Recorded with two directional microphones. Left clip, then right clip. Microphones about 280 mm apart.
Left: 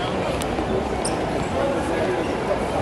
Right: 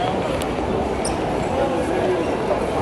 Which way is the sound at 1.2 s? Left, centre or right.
Centre.